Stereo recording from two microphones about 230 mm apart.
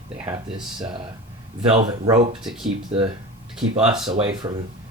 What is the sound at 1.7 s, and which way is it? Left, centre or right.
Speech, right.